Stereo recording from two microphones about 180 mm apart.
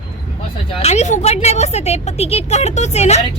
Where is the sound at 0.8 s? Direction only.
40° left (ahead or behind).